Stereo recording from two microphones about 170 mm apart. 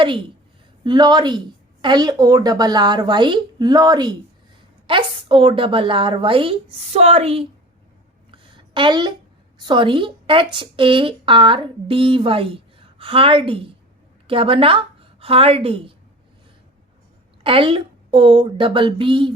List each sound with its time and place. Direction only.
0.9 s a woman's voice: 25° right (ahead or behind)
8.3 s a sound: 30° right (ahead or behind)
9.6 s a woman's voice: 30° right (ahead or behind)
17.4 s a woman's voice: 30° right (ahead or behind)